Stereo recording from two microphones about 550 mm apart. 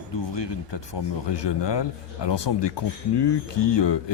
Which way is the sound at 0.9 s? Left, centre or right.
Left.